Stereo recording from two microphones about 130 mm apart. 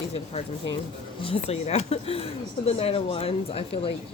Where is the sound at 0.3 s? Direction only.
50° left (ahead or behind).